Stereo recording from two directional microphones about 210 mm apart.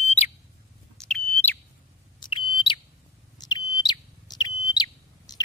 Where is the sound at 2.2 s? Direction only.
25° left (ahead or behind).